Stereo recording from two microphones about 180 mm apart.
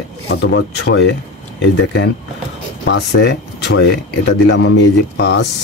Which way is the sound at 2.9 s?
70° left (ahead or behind).